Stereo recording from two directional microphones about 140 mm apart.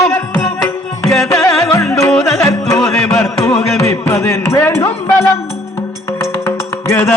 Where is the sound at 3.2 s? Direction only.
20° left (ahead or behind).